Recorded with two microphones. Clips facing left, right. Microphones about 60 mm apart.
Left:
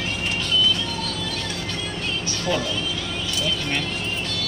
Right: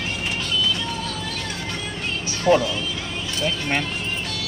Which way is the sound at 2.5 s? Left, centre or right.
Right.